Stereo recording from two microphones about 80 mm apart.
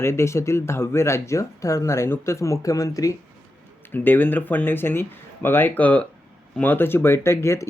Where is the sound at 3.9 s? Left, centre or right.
Left.